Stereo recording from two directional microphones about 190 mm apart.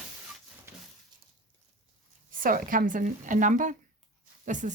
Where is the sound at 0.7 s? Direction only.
10° right (ahead or behind).